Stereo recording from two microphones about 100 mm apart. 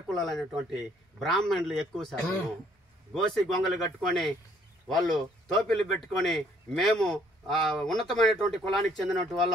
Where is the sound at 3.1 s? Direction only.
5° left (ahead or behind).